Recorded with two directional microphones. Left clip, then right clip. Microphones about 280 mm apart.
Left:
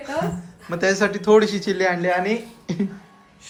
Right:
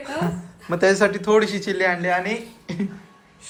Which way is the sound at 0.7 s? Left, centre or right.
Centre.